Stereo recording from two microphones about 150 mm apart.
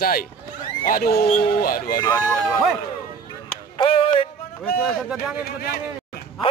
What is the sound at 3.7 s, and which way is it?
Music, 35° left (ahead or behind).